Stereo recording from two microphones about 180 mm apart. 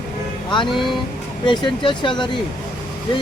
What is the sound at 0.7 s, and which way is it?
Speech, centre (ahead or behind).